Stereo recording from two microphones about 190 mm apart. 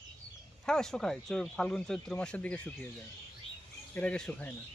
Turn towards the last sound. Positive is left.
turn(degrees=5)  # may be behind; listen again after turning